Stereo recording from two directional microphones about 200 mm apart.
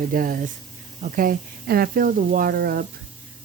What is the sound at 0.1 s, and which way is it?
Speech, 45° right (ahead or behind).